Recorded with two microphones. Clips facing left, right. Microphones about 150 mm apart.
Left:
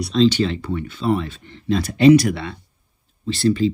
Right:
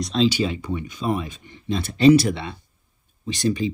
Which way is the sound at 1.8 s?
30° right (ahead or behind).